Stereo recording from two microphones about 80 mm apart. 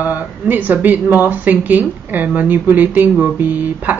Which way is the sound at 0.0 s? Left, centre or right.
Right.